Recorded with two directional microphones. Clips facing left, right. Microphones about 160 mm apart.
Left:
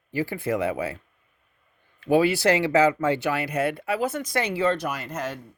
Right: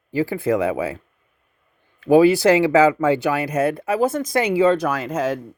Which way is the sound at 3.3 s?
45° right (ahead or behind).